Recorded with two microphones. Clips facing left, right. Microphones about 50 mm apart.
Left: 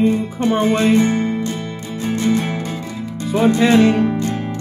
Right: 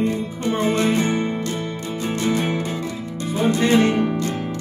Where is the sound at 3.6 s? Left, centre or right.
Left.